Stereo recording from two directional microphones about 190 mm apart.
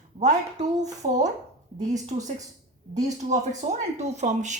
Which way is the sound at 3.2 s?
35° right (ahead or behind).